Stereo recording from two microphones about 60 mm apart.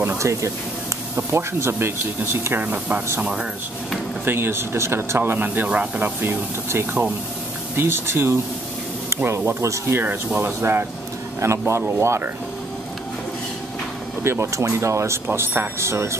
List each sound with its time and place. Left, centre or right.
0.2 s speech: right
1.1 s speech: right
2.6 s speech: right
4.2 s speech: right
6.7 s speech: right
10.0 s speech: right
11.3 s speech: right
14.2 s speech: right
15.2 s speech: right